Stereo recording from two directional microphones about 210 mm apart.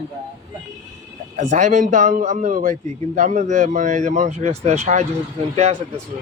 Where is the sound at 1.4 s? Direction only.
35° right (ahead or behind).